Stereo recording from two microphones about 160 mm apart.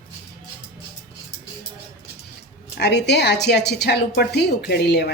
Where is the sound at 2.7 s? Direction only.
90° left.